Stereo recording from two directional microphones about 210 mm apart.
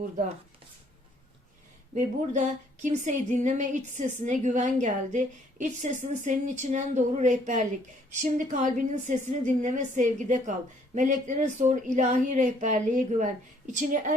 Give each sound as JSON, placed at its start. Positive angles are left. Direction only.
{"t": 2.0, "sound": "a woman's voice", "side_deg": -35}